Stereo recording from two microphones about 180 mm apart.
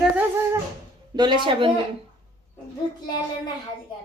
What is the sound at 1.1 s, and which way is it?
Speech, 25° right (ahead or behind).